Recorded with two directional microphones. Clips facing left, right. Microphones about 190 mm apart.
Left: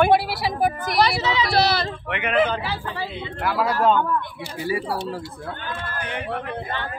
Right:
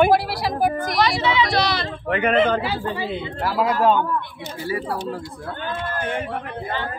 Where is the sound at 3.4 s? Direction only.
25° right (ahead or behind).